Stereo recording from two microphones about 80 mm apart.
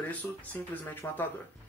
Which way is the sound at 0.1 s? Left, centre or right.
Left.